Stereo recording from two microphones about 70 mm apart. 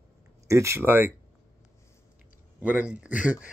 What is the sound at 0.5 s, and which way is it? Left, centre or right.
Speech, right.